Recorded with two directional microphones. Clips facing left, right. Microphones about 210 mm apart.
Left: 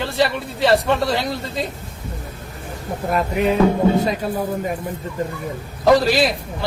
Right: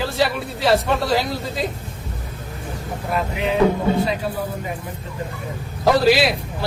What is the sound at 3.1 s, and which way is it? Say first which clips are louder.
Speech: left 3 dB; 50° left (ahead or behind).